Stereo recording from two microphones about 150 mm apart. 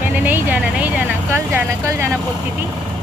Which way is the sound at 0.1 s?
10° right (ahead or behind).